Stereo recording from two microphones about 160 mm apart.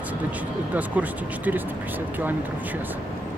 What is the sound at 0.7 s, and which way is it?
Speech, 10° right (ahead or behind).